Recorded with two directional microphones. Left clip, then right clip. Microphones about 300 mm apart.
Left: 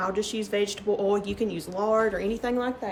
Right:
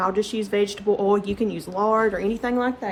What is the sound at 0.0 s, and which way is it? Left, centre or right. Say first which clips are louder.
A woman's voice: right 5 dB; right.